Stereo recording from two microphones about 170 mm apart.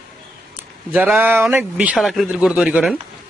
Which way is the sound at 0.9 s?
10° right (ahead or behind).